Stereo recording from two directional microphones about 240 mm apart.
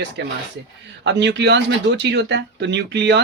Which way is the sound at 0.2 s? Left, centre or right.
Right.